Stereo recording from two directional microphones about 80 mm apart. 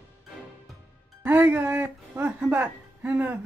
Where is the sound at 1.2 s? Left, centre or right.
Right.